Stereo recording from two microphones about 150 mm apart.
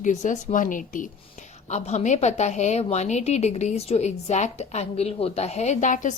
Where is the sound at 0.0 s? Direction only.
55° left (ahead or behind).